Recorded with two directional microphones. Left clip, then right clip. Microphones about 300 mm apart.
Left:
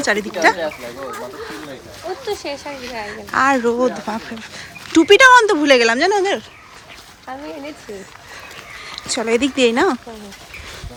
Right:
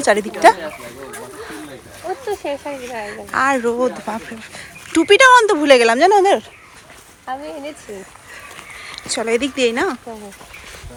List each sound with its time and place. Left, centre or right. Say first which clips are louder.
0.0 s speech: right 4 dB; centre
2.2 s speech: right 2 dB; right
3.1 s speech: left 1 dB; centre
8.8 s speech: even; centre